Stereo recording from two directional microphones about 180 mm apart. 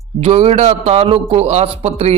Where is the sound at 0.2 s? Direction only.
35° right (ahead or behind).